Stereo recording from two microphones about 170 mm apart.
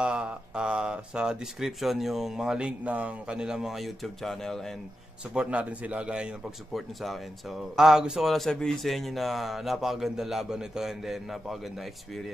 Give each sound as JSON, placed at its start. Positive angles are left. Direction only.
{"t": 0.0, "sound": "speech", "side_deg": -5}